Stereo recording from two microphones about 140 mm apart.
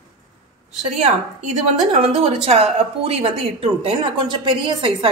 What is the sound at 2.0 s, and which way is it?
A woman's voice, 45° right (ahead or behind).